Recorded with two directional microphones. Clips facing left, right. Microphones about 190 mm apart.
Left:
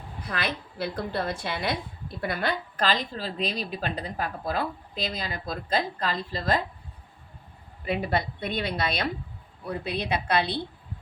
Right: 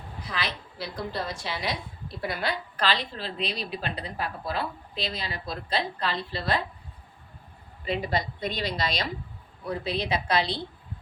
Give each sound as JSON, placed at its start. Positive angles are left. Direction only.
{"t": 0.3, "sound": "a woman's voice", "side_deg": 55}
{"t": 7.9, "sound": "a woman's voice", "side_deg": 55}